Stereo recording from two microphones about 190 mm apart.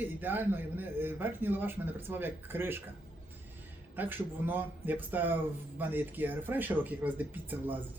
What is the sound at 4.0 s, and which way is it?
Speech, 10° right (ahead or behind).